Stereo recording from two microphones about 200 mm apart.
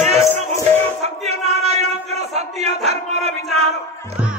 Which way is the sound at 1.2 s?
30° right (ahead or behind).